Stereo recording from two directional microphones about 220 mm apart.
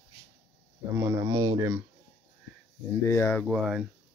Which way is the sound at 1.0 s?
15° right (ahead or behind).